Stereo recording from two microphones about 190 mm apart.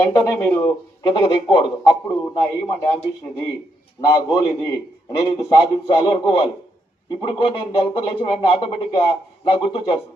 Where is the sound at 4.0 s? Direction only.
20° left (ahead or behind).